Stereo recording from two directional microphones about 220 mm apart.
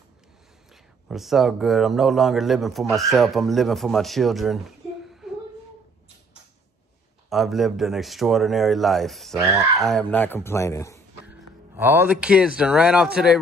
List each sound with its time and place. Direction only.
1.0 s a man's voice: centre (ahead or behind)
7.2 s a man's voice: centre (ahead or behind)
11.2 s speech: 10° right (ahead or behind)